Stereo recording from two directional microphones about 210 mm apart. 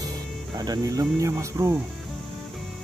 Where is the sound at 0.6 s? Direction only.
15° right (ahead or behind).